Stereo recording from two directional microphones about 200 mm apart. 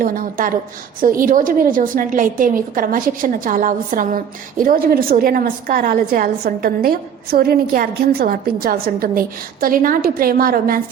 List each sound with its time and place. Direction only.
0.0 s a woman's voice: 45° right (ahead or behind)